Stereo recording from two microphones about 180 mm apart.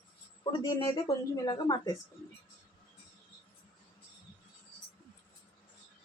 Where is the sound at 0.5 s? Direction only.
25° left (ahead or behind).